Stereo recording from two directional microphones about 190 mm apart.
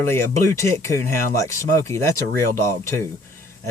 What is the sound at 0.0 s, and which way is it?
Speech, 15° left (ahead or behind).